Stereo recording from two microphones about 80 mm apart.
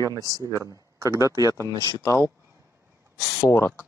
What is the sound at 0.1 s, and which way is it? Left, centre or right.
Speech, right.